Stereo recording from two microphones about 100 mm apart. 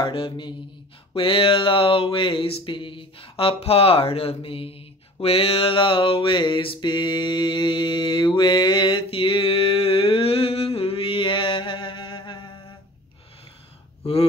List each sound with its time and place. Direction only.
0.0 s mantra: 55° left (ahead or behind)
1.1 s speech: 60° left (ahead or behind)